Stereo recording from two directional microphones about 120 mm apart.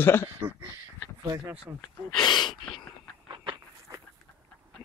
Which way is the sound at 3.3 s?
35° right (ahead or behind).